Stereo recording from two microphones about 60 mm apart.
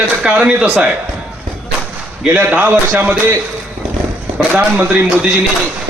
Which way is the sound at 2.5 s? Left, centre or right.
Right.